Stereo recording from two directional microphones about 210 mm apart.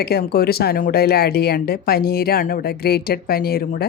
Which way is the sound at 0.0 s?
50° left (ahead or behind).